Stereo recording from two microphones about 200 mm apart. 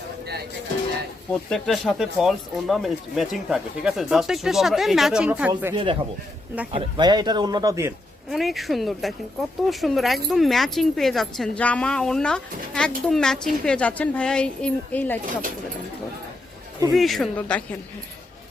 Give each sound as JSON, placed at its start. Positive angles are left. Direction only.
{"t": 1.5, "sound": "speech", "side_deg": 0}
{"t": 5.7, "sound": "speech", "side_deg": -25}
{"t": 8.3, "sound": "speech", "side_deg": 0}
{"t": 16.9, "sound": "speech", "side_deg": 0}